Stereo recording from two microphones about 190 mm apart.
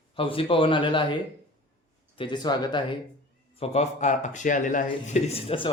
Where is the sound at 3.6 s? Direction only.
35° left (ahead or behind).